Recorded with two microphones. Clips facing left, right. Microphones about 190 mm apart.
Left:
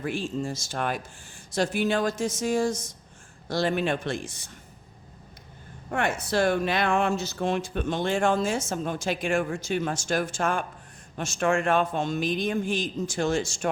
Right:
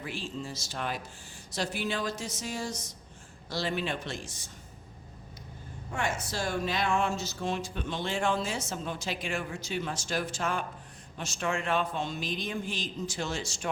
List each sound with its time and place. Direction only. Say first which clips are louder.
0.0 s speech: left 8 dB; 50° left (ahead or behind)
5.9 s speech: left 7 dB; 60° left (ahead or behind)